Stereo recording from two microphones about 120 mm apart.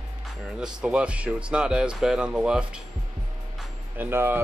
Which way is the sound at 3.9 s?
20° right (ahead or behind).